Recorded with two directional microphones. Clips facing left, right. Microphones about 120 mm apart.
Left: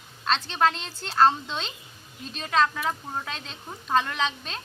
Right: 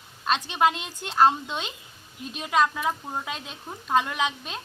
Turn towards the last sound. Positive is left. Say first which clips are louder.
# right 1 dB
turn(degrees=-10)  # may be behind; listen again after turning